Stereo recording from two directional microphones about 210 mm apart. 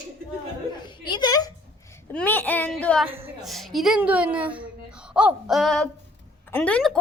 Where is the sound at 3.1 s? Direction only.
Centre (ahead or behind).